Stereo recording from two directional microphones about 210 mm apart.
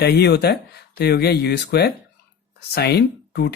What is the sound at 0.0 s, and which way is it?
Speech, 50° left (ahead or behind).